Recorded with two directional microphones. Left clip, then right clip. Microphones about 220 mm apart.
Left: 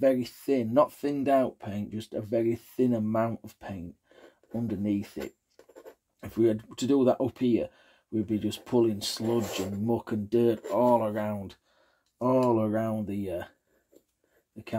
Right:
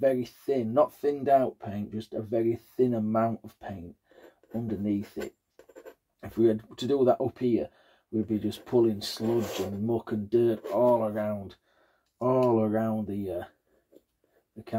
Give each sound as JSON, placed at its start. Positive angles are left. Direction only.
{"t": 0.0, "sound": "speech", "side_deg": 35}
{"t": 5.2, "sound": "a sound", "side_deg": -10}
{"t": 6.2, "sound": "speech", "side_deg": 35}